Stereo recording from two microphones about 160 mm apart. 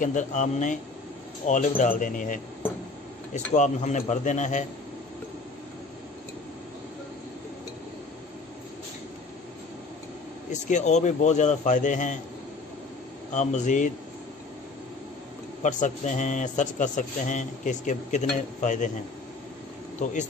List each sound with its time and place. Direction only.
0.0 s a man's voice: 50° left (ahead or behind)
10.5 s a man's voice: 45° left (ahead or behind)
13.3 s a man's voice: 50° left (ahead or behind)
15.6 s a man's voice: 50° left (ahead or behind)